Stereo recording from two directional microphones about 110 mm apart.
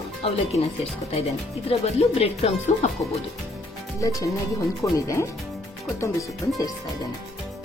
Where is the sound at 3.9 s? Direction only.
30° left (ahead or behind).